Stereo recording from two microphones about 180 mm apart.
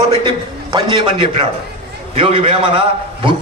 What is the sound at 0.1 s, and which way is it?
A man's voice, 25° right (ahead or behind).